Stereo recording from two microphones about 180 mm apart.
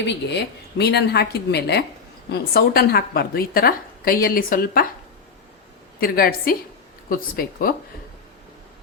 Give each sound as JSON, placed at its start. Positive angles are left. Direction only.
{"t": 0.1, "sound": "a woman's voice", "side_deg": 70}
{"t": 6.0, "sound": "a woman's voice", "side_deg": 55}